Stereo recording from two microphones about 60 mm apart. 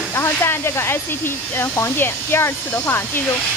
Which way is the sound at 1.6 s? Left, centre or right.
Left.